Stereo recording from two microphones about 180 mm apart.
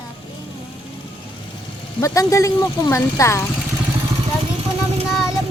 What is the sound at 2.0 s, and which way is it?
Speech, 20° left (ahead or behind).